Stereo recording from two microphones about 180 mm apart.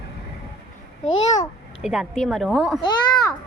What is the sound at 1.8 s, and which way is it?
Speech, 5° right (ahead or behind).